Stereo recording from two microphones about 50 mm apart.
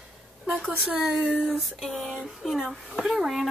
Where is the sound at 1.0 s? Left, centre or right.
Centre.